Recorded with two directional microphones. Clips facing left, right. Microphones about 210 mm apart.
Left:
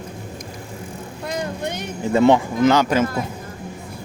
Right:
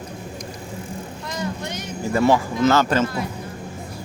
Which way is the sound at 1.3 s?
55° left (ahead or behind).